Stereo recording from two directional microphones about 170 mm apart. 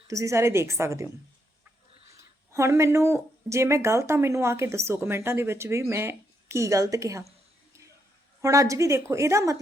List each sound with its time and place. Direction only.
0.1 s speech: 20° right (ahead or behind)
2.5 s speech: 15° right (ahead or behind)
8.4 s speech: 20° right (ahead or behind)